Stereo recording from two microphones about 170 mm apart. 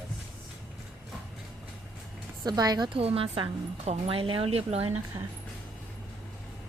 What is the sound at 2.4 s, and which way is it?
A woman's voice, 25° right (ahead or behind).